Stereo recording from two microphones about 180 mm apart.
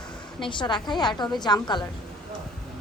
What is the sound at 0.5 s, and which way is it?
A woman's voice, 25° left (ahead or behind).